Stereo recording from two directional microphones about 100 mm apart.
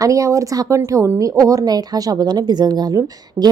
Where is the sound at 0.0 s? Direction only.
35° right (ahead or behind).